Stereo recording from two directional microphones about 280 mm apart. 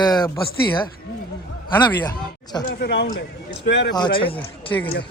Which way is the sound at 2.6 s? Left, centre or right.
Left.